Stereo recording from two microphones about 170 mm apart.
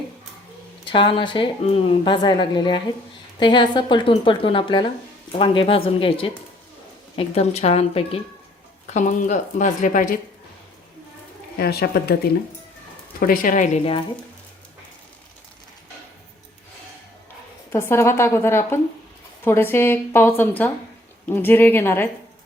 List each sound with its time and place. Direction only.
0.9 s a woman's voice: 30° left (ahead or behind); by 10.2 s 50° left (ahead or behind)
11.5 s speech: 65° left (ahead or behind)
13.1 s speech: 55° left (ahead or behind)
17.7 s a woman's voice: 15° left (ahead or behind)